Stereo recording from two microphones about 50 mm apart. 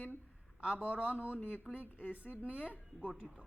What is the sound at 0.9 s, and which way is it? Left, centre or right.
A woman's voice, left.